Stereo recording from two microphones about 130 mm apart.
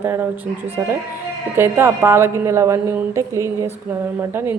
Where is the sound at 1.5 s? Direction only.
20° right (ahead or behind).